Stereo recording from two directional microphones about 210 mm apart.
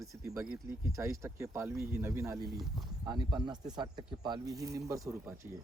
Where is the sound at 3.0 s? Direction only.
20° right (ahead or behind).